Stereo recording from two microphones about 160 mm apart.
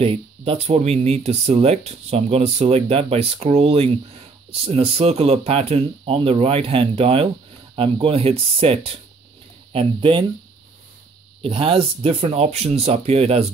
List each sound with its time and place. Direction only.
0.0 s speech: 35° right (ahead or behind)
11.4 s speech: 35° right (ahead or behind)